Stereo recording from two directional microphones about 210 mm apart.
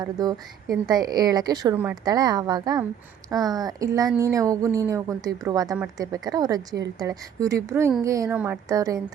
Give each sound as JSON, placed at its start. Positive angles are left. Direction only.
{"t": 0.0, "sound": "a woman's voice", "side_deg": -20}